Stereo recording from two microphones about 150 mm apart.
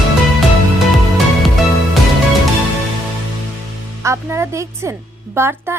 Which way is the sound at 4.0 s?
20° right (ahead or behind).